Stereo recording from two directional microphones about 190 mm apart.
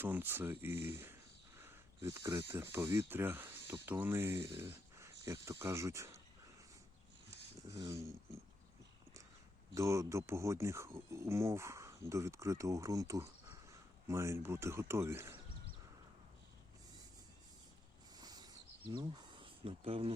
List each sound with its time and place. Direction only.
0.0 s speech: 10° right (ahead or behind)
1.5 s a sound: 10° right (ahead or behind)
2.7 s speech: 15° right (ahead or behind)
7.7 s speech: 15° right (ahead or behind)
9.7 s speech: 15° right (ahead or behind)
18.2 s a sound: 20° right (ahead or behind)